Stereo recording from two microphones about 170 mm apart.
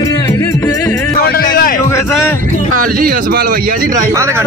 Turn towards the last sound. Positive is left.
turn(degrees=-15)  # may be behind; listen again after turning